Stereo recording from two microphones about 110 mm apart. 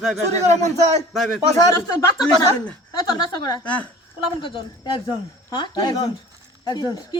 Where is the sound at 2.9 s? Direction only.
40° left (ahead or behind).